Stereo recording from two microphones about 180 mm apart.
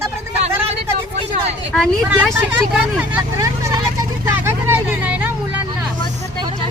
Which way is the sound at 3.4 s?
20° right (ahead or behind).